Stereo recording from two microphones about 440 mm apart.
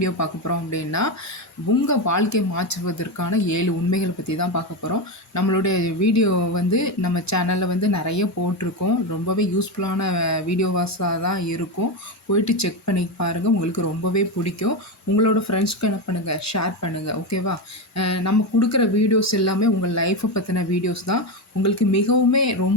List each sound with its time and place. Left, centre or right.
0.0 s speech: left